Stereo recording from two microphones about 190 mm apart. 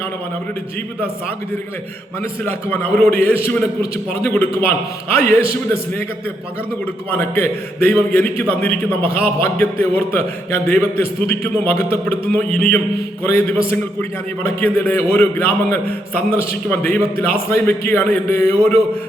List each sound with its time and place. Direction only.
2.4 s a man's voice: 10° left (ahead or behind)
7.1 s a man's voice: 10° left (ahead or behind)
8.9 s a man's voice: 30° right (ahead or behind)
9.1 s a man's voice: 10° left (ahead or behind)